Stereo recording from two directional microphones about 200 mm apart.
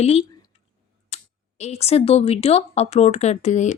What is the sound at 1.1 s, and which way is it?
Tick, 35° left (ahead or behind).